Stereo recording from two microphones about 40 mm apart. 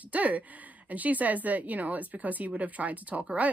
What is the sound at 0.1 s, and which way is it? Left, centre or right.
Speech, right.